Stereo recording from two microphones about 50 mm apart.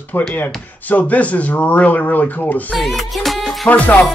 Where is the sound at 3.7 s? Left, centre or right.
Left.